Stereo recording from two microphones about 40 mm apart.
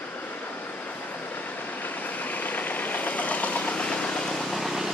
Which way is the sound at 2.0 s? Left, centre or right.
Left.